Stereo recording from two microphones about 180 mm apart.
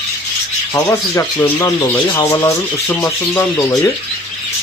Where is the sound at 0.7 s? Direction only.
15° left (ahead or behind).